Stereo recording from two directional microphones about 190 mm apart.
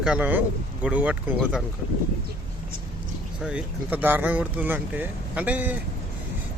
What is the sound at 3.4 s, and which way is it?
Speech, 5° right (ahead or behind).